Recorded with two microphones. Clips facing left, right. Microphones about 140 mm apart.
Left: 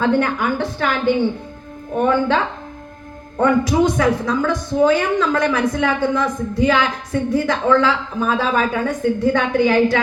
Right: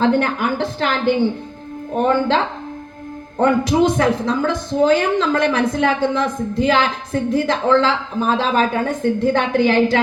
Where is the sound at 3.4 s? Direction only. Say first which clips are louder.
Even; 25° right (ahead or behind).